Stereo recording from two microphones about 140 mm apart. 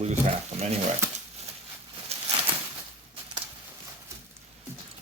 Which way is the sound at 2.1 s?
45° right (ahead or behind).